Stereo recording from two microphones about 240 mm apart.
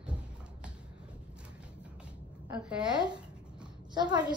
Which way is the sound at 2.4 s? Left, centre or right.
Centre.